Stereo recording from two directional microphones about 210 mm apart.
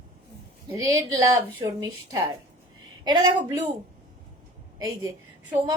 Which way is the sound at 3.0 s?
20° right (ahead or behind).